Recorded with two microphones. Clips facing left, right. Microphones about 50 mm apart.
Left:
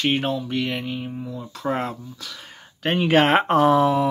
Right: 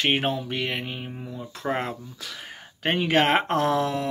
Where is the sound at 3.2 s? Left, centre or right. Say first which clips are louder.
Left 5 dB; centre.